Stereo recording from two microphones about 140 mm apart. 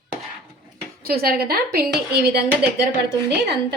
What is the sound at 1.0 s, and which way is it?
Speech, 90° right.